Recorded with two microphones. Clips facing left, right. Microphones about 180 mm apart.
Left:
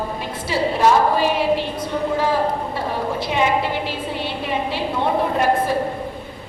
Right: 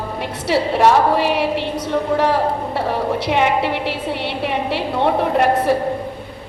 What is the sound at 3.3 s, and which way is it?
A woman's voice, 65° right (ahead or behind).